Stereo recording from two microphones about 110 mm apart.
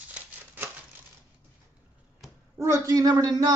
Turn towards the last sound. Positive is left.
turn(degrees=-35)  # may be behind; listen again after turning